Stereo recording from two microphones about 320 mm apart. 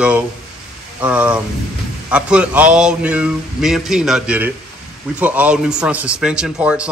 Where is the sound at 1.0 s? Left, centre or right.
Centre.